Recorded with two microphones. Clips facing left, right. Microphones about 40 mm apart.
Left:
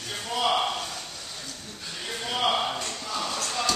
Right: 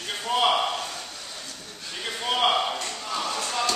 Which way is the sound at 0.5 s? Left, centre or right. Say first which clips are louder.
Right 1 dB; centre.